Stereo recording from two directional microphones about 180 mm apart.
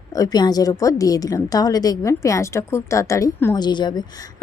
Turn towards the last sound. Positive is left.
turn(degrees=25)  # may be behind; listen again after turning